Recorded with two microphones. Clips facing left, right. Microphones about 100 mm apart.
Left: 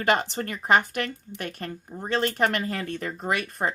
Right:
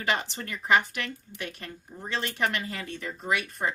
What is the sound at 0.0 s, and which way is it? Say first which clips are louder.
Speech: left 6 dB; 45° left (ahead or behind).